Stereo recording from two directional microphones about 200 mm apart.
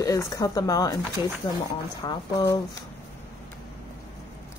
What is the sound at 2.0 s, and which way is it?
Speech, 20° left (ahead or behind).